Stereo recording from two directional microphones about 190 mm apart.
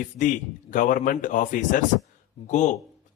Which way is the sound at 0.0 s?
40° left (ahead or behind).